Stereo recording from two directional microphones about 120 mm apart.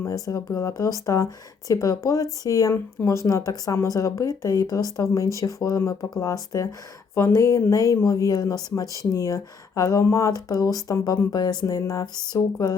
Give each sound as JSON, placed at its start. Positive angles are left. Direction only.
{"t": 0.0, "sound": "speech", "side_deg": 25}